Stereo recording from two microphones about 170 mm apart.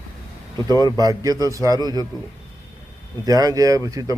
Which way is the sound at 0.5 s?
25° right (ahead or behind).